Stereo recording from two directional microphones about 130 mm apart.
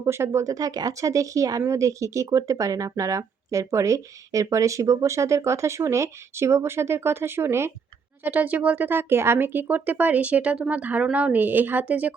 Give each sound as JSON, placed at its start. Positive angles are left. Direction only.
{"t": 0.0, "sound": "speech", "side_deg": -20}